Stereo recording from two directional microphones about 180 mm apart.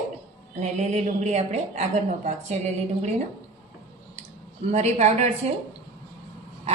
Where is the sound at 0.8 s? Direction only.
40° right (ahead or behind).